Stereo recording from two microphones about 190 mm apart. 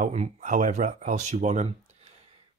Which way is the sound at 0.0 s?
40° right (ahead or behind).